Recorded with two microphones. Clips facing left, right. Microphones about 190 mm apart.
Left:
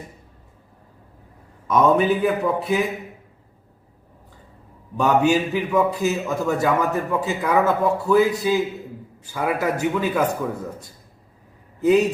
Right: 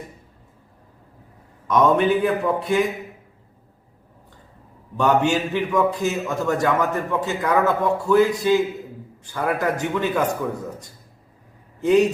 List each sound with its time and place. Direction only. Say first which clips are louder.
1.6 s a man's voice: even; 5° left (ahead or behind)
4.9 s a man's voice: left 1 dB; 5° left (ahead or behind)